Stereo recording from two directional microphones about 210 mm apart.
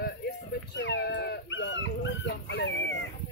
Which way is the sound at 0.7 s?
60° left (ahead or behind).